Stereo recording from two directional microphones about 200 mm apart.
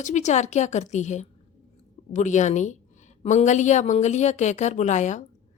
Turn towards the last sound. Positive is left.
turn(degrees=35)  # may be behind; listen again after turning